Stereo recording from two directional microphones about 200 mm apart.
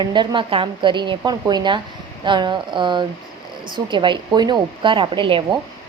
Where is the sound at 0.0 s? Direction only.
25° right (ahead or behind).